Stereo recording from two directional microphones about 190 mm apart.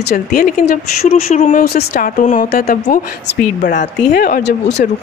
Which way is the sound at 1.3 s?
40° left (ahead or behind).